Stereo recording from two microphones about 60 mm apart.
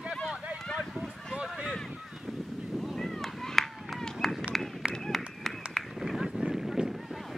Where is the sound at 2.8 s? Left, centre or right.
Centre.